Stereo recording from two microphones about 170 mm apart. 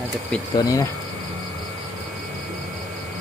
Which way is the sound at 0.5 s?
20° left (ahead or behind).